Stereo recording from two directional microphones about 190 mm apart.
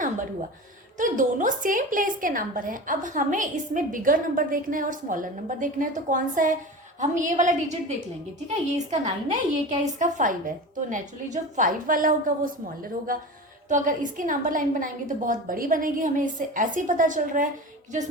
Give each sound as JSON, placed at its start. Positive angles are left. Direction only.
{"t": 0.9, "sound": "a woman's voice", "side_deg": -40}